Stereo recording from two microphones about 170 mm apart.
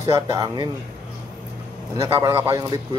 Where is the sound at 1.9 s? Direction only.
15° right (ahead or behind).